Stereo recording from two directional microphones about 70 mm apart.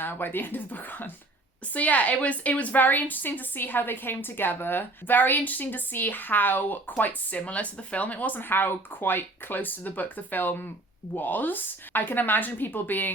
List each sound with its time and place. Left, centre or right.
0.0 s a woman's voice: left